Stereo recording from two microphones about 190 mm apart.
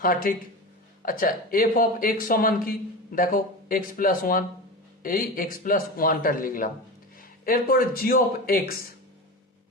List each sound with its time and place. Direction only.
0.0 s speech: 50° left (ahead or behind)